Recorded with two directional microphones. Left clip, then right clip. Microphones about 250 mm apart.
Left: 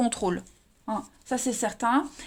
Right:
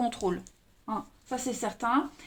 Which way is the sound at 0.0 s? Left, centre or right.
Left.